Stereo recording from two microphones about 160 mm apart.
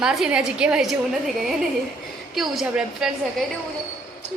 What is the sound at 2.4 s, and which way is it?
Speech, 5° right (ahead or behind).